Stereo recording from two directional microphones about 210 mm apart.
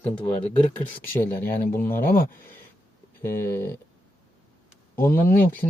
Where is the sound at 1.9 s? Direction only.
45° left (ahead or behind).